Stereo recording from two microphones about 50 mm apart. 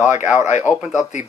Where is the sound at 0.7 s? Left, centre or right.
Left.